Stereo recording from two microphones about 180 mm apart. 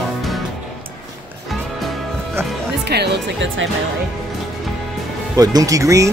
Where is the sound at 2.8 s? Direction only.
70° right (ahead or behind).